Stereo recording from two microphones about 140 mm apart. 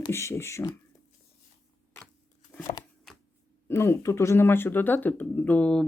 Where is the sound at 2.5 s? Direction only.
15° left (ahead or behind).